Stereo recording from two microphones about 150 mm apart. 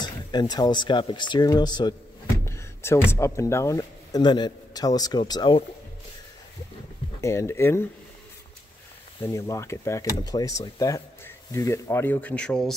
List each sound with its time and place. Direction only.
0.0 s speech: 30° left (ahead or behind)
2.4 s a sound: 20° left (ahead or behind)
3.1 s speech: 20° left (ahead or behind)
7.2 s speech: 20° left (ahead or behind)
9.2 s speech: 20° left (ahead or behind)